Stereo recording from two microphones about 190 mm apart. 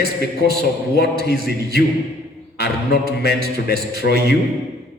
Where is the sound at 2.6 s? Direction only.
60° left (ahead or behind).